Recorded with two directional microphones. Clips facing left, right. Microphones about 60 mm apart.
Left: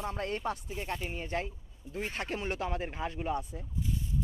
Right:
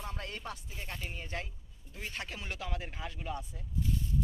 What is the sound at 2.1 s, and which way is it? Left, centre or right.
Speech, left.